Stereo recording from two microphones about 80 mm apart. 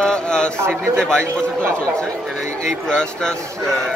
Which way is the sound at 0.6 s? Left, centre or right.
Right.